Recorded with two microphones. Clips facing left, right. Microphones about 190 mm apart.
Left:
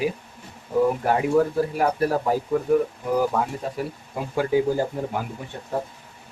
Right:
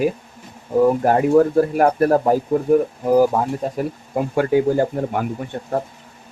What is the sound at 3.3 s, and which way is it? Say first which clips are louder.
Speech: right 4 dB; 30° right (ahead or behind).